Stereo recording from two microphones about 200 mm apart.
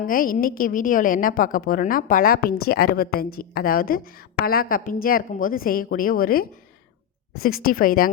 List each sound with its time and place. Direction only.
0.0 s a woman's voice: 45° left (ahead or behind)